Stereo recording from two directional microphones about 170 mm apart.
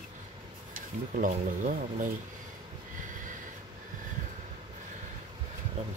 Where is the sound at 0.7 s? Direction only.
50° right (ahead or behind).